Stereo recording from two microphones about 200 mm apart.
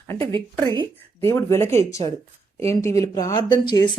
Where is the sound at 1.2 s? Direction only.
15° left (ahead or behind).